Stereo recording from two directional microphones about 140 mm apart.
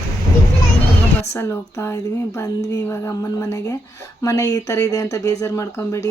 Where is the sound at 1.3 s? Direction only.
20° left (ahead or behind).